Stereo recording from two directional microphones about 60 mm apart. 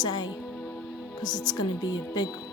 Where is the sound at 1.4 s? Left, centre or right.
Left.